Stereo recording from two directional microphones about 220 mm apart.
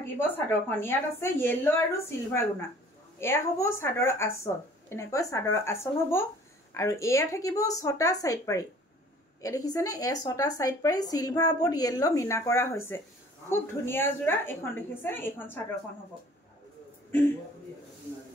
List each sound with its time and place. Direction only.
0.0 s a woman's voice: 10° left (ahead or behind)